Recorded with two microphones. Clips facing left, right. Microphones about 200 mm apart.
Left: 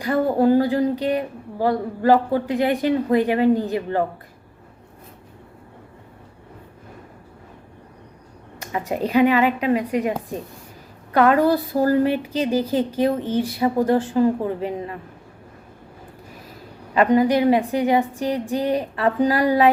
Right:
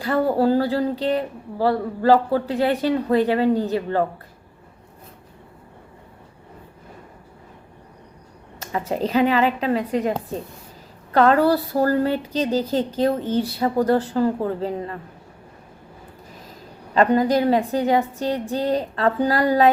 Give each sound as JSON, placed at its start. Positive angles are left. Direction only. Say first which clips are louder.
{"t": 0.3, "sound": "speech", "louder": "left 2 dB", "side_deg": 15}
{"t": 8.6, "sound": "speech", "louder": "even", "side_deg": 15}
{"t": 16.9, "sound": "speech", "louder": "left 1 dB", "side_deg": 10}